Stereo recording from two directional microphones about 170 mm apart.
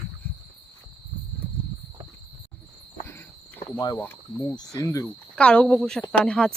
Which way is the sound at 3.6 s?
55° left (ahead or behind).